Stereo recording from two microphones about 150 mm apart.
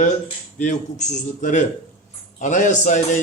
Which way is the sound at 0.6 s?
50° left (ahead or behind).